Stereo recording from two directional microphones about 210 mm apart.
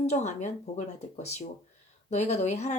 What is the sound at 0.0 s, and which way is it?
Speech, 30° left (ahead or behind).